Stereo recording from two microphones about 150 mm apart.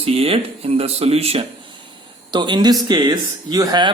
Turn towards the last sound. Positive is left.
turn(degrees=-25)  # may be behind; listen again after turning